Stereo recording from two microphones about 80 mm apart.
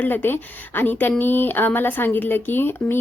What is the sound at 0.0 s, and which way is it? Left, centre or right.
Speech, left.